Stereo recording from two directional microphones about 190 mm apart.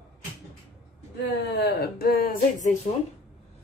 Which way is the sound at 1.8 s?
55° left (ahead or behind).